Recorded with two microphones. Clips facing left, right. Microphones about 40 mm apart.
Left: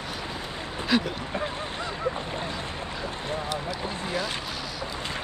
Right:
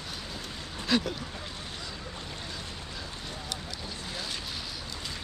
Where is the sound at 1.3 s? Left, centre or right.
Left.